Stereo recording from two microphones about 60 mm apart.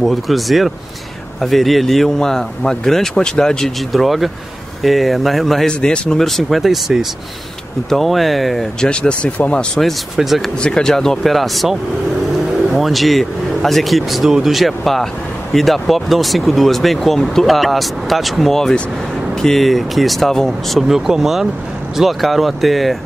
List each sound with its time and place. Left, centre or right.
0.0 s speech: centre
3.9 s speech: centre
8.8 s speech: centre
10.1 s speech: centre
10.6 s speech: centre
12.7 s speech: centre
20.8 s speech: centre